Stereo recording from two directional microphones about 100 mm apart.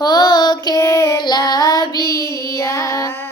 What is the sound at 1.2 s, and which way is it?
Child singing, 45° left (ahead or behind).